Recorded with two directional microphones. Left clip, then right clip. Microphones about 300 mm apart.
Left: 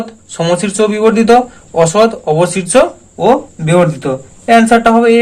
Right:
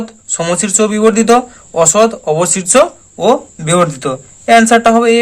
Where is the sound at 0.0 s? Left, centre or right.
Centre.